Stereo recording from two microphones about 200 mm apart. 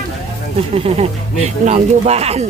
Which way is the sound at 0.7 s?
30° right (ahead or behind).